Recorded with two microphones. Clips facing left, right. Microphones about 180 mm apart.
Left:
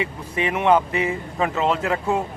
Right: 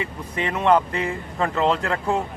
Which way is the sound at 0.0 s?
20° left (ahead or behind).